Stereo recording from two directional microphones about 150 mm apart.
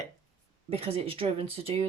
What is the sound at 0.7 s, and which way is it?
Speech, 40° right (ahead or behind).